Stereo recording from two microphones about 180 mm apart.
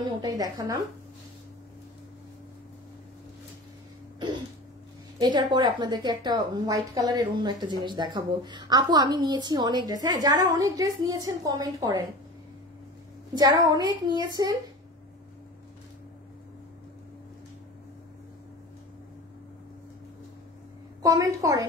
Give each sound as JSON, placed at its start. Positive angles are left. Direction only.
{"t": 0.0, "sound": "a woman's voice", "side_deg": -20}
{"t": 5.2, "sound": "a woman's voice", "side_deg": -25}
{"t": 13.4, "sound": "a woman's voice", "side_deg": -20}
{"t": 21.0, "sound": "a woman's voice", "side_deg": -20}